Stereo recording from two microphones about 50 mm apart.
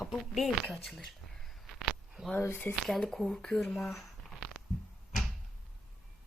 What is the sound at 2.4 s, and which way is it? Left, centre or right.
Speech, left.